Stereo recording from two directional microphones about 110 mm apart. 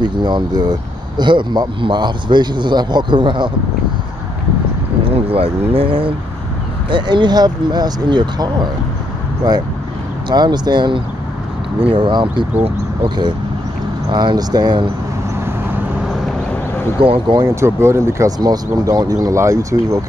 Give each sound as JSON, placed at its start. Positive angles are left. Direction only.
{"t": 0.0, "sound": "speech", "side_deg": -40}
{"t": 5.1, "sound": "speech", "side_deg": -60}
{"t": 10.3, "sound": "speech", "side_deg": -40}
{"t": 12.5, "sound": "speech", "side_deg": -65}
{"t": 14.1, "sound": "speech", "side_deg": -40}
{"t": 17.0, "sound": "speech", "side_deg": -55}
{"t": 17.4, "sound": "speech", "side_deg": -25}
{"t": 18.4, "sound": "speech", "side_deg": -35}